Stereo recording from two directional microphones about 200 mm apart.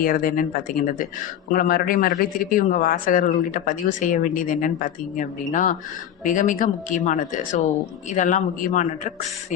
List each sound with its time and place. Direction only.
0.0 s speech: 45° left (ahead or behind)
1.5 s a man's voice: 45° left (ahead or behind)